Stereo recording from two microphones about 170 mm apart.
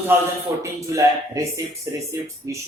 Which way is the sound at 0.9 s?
20° right (ahead or behind).